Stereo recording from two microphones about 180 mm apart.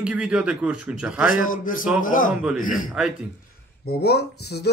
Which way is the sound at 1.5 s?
50° left (ahead or behind).